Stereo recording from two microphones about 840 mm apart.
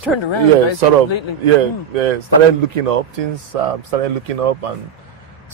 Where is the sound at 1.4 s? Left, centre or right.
Right.